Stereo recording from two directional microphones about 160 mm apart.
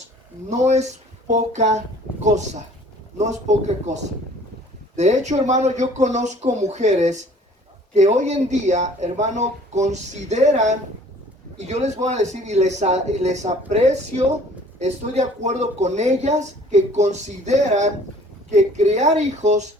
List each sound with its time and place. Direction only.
0.5 s speech: 45° right (ahead or behind)
3.2 s speech: 45° right (ahead or behind)